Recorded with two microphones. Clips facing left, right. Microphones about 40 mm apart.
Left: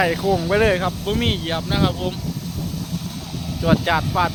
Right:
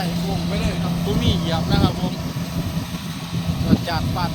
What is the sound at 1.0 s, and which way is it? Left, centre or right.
Speech, left.